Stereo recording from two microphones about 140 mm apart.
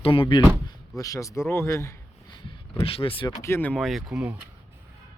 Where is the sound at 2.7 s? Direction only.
40° left (ahead or behind).